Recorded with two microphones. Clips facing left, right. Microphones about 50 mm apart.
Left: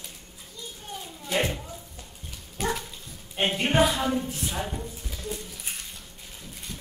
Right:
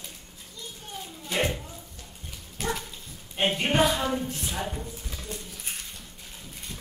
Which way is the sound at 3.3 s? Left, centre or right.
Centre.